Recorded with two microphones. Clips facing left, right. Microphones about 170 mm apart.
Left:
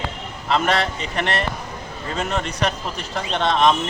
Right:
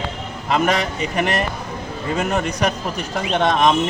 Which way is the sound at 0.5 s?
15° right (ahead or behind).